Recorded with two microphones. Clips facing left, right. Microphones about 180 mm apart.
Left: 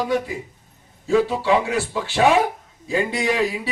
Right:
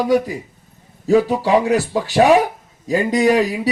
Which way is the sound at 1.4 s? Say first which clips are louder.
Right 4 dB; 40° right (ahead or behind).